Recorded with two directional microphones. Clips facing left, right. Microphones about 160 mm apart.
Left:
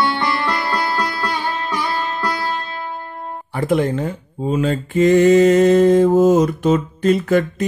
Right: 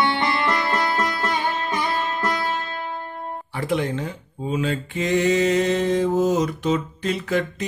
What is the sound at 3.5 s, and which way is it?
Speech, 45° left (ahead or behind).